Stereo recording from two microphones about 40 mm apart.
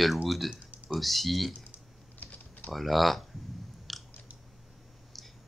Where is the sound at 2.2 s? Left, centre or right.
Left.